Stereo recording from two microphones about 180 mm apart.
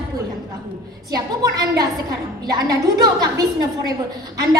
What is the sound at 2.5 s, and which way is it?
A woman's voice, 20° right (ahead or behind).